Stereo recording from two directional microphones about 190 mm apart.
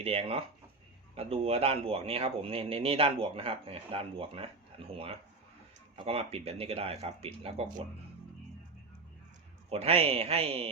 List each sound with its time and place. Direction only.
0.0 s speech: 30° right (ahead or behind)
9.6 s speech: 30° right (ahead or behind)